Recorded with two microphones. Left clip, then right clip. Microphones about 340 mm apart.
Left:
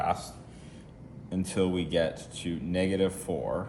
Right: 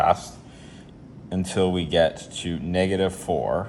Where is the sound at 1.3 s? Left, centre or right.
Right.